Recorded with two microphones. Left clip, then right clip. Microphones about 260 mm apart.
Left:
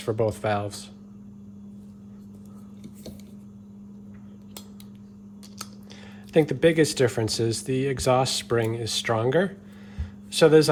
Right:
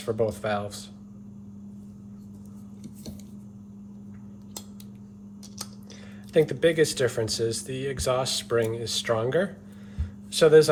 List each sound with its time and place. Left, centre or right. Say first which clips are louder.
0.0 s speech: left 2 dB; left
6.3 s speech: left 2 dB; left